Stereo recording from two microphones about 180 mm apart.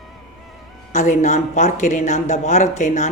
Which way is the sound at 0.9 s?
40° left (ahead or behind).